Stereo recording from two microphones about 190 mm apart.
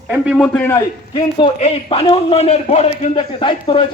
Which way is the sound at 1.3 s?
25° left (ahead or behind).